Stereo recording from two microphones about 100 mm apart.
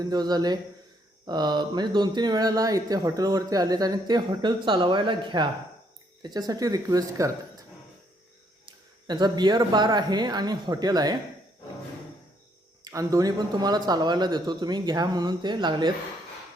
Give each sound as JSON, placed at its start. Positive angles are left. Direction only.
{"t": 0.0, "sound": "speech", "side_deg": -45}
{"t": 6.2, "sound": "speech", "side_deg": -40}
{"t": 9.0, "sound": "speech", "side_deg": -45}
{"t": 12.8, "sound": "speech", "side_deg": -35}